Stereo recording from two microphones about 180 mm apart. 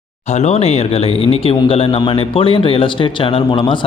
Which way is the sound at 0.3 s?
35° left (ahead or behind).